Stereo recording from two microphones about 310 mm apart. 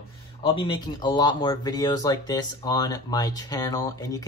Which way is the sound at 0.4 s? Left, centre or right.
Centre.